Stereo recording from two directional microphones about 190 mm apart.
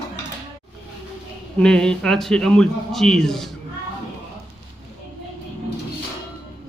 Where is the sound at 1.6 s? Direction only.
5° left (ahead or behind).